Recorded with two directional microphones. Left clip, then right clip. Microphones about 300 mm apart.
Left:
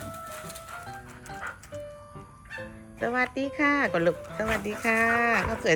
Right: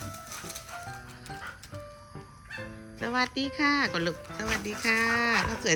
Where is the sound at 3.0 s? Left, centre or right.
Centre.